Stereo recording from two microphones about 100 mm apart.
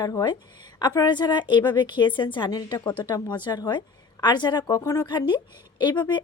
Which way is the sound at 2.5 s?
40° left (ahead or behind).